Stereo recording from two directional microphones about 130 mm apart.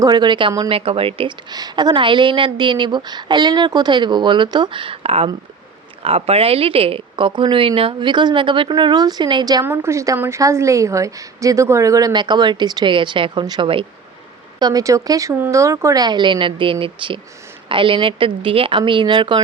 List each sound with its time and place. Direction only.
0.0 s a woman's voice: 35° right (ahead or behind)
1.5 s a woman's voice: 30° right (ahead or behind)
9.6 s a woman's voice: 20° right (ahead or behind); by 13.8 s 40° right (ahead or behind)
14.6 s a woman's voice: 30° right (ahead or behind)